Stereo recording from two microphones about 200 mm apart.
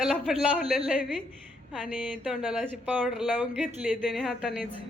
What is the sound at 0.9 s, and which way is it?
Speech, 5° right (ahead or behind).